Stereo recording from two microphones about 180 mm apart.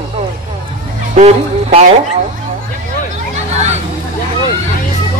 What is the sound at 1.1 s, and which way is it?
Speech, 35° right (ahead or behind).